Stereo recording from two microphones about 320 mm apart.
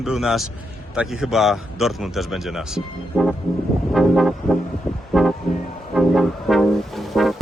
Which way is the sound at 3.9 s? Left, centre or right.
Centre.